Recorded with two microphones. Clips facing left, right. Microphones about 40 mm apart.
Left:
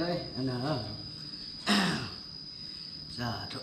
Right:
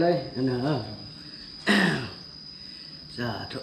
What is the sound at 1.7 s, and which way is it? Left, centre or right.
Throat clearing, right.